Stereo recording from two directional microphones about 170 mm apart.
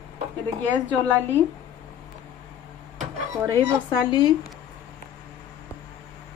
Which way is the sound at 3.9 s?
25° left (ahead or behind).